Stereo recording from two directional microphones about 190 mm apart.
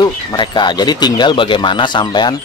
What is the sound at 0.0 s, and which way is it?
Speech, 25° left (ahead or behind).